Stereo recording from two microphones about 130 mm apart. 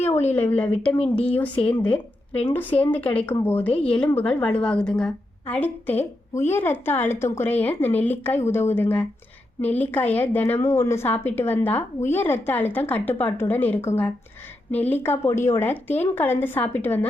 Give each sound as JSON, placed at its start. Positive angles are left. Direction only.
{"t": 0.3, "sound": "a woman's voice", "side_deg": 15}
{"t": 0.9, "sound": "speech", "side_deg": 45}
{"t": 1.6, "sound": "a woman's voice", "side_deg": 10}